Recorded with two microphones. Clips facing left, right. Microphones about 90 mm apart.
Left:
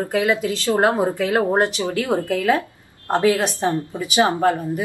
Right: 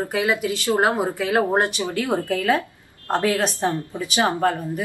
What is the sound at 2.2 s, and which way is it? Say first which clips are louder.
A woman's voice: left 2 dB; 15° left (ahead or behind).